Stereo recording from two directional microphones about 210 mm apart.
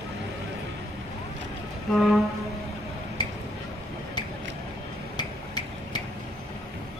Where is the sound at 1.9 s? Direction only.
Centre (ahead or behind).